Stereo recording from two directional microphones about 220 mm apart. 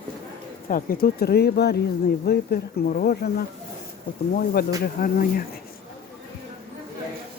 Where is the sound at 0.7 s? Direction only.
40° left (ahead or behind).